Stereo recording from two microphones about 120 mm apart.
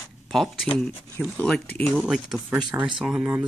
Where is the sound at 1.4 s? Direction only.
10° left (ahead or behind).